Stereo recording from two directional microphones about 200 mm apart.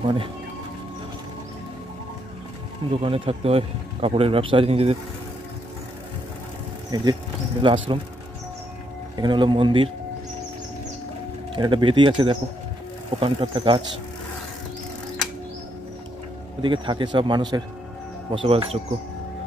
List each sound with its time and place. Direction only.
0.0 s speech: 25° right (ahead or behind)
2.9 s speech: 30° right (ahead or behind)
6.9 s speech: 20° right (ahead or behind)
9.1 s speech: 20° right (ahead or behind)
11.5 s speech: 25° right (ahead or behind)
16.6 s speech: 25° right (ahead or behind)